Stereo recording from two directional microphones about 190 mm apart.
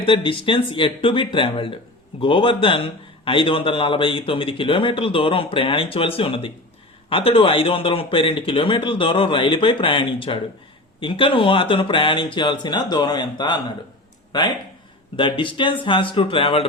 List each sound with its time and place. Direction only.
0.0 s a man's voice: 25° left (ahead or behind)
15.1 s a man's voice: 25° left (ahead or behind)